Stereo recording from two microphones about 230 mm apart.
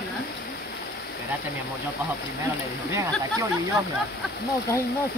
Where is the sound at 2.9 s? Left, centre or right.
Centre.